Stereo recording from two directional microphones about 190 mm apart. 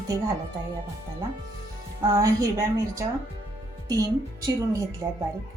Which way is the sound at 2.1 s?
15° right (ahead or behind).